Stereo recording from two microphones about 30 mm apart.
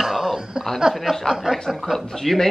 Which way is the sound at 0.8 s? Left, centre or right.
Right.